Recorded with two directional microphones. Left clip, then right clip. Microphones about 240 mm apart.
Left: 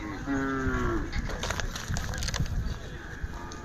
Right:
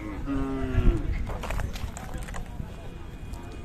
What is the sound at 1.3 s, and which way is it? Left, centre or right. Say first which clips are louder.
Run: left 3 dB; left.